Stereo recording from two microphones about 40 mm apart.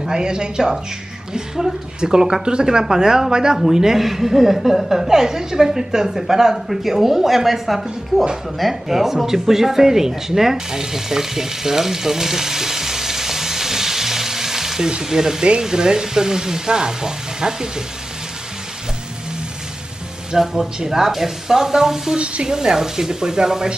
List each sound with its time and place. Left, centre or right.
0.1 s a woman's voice: centre
20.5 s a woman's voice: centre
22.1 s a woman's voice: right